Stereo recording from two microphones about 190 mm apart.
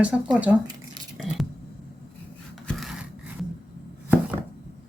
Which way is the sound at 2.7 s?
Centre (ahead or behind).